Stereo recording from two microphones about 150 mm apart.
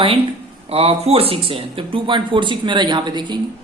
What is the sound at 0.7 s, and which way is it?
Speech, 40° right (ahead or behind).